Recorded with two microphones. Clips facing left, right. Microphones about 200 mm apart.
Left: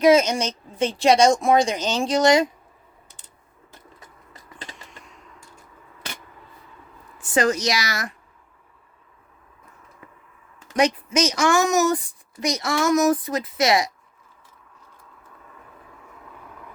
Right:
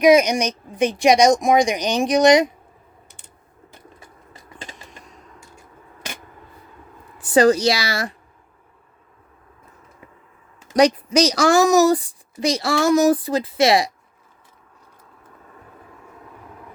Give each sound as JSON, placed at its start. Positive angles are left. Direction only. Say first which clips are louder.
{"t": 0.0, "sound": "speech", "louder": "right 2 dB", "side_deg": -15}
{"t": 7.2, "sound": "speech", "louder": "right 6 dB", "side_deg": -35}
{"t": 10.8, "sound": "speech", "louder": "right 5 dB", "side_deg": -35}